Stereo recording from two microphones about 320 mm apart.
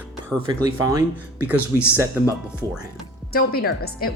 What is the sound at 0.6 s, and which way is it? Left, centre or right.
Speech, centre.